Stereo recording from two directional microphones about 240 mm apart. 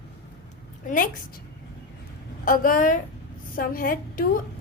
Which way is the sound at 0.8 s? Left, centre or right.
Left.